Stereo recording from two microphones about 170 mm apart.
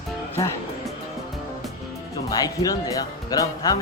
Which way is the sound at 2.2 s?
20° left (ahead or behind).